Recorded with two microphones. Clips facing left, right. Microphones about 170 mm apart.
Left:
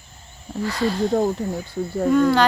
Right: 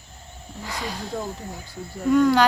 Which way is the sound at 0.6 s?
15° right (ahead or behind).